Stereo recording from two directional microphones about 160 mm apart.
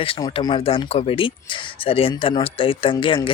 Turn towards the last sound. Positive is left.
turn(degrees=30)  # may be behind; listen again after turning